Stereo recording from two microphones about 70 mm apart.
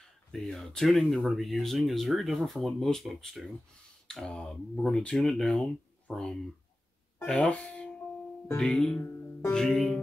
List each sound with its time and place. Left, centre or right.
0.3 s speech: centre